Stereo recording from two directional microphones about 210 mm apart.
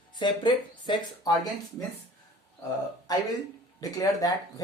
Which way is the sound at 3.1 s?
20° left (ahead or behind).